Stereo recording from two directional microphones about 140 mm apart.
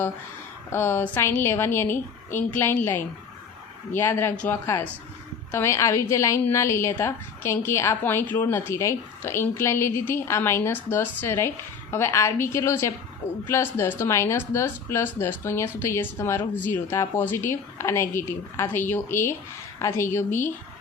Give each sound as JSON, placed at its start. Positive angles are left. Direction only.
{"t": 0.7, "sound": "a woman's voice", "side_deg": 15}